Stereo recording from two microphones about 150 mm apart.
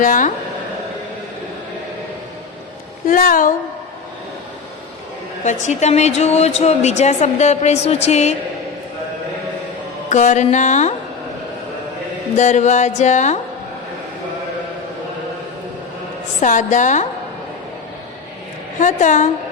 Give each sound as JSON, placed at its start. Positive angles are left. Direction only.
{"t": 0.0, "sound": "a woman's voice", "side_deg": 60}
{"t": 3.1, "sound": "a woman's voice", "side_deg": 65}
{"t": 5.4, "sound": "speech", "side_deg": 50}
{"t": 10.1, "sound": "speech", "side_deg": 50}
{"t": 12.4, "sound": "speech", "side_deg": 55}
{"t": 16.4, "sound": "a woman's voice", "side_deg": 55}
{"t": 18.8, "sound": "a woman's voice", "side_deg": 55}